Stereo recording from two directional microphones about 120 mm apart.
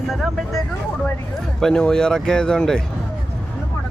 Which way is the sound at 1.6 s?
5° left (ahead or behind).